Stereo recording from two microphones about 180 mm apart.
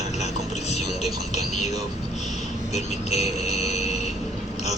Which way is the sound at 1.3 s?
40° left (ahead or behind).